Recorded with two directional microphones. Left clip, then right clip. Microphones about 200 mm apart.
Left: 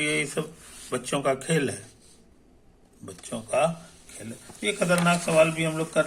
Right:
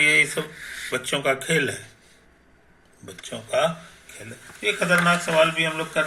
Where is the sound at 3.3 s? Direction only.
25° left (ahead or behind).